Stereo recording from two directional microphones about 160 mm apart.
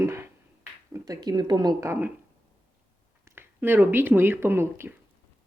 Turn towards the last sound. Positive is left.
turn(degrees=-15)  # may be behind; listen again after turning